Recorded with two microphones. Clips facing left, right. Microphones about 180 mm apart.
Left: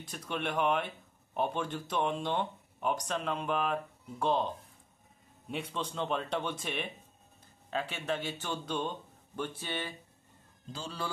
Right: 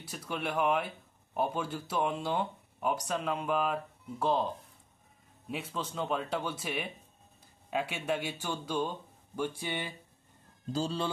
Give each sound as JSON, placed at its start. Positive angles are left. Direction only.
{"t": 0.0, "sound": "speech", "side_deg": -5}
{"t": 5.5, "sound": "speech", "side_deg": -5}
{"t": 10.7, "sound": "speech", "side_deg": -35}